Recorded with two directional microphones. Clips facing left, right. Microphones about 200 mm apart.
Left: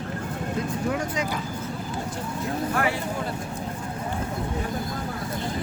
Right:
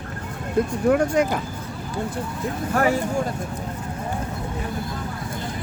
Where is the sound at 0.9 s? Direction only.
55° right (ahead or behind).